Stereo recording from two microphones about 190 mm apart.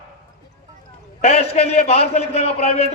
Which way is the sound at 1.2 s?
35° left (ahead or behind).